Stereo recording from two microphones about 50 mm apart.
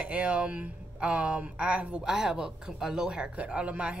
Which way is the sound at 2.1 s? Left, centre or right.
Centre.